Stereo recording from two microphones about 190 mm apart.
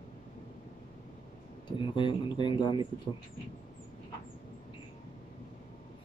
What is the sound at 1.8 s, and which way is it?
Speech, 25° left (ahead or behind).